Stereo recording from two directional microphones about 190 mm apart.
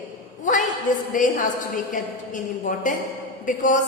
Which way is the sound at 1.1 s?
45° left (ahead or behind).